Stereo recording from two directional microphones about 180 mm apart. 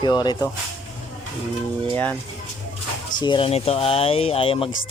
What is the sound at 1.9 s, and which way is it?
Speech, 10° left (ahead or behind).